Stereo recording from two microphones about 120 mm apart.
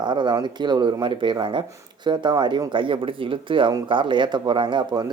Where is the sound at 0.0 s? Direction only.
40° right (ahead or behind).